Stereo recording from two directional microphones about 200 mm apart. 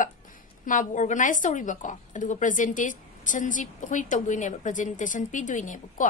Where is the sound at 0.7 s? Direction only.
40° left (ahead or behind).